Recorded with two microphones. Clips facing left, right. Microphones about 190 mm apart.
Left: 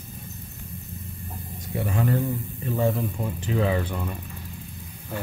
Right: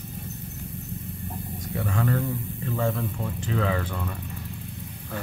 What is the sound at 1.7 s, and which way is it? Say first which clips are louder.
Speech: left 2 dB; 20° left (ahead or behind).